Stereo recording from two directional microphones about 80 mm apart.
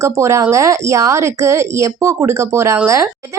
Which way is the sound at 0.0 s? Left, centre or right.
Right.